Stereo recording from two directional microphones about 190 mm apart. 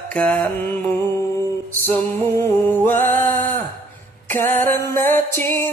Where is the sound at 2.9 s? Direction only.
45° right (ahead or behind).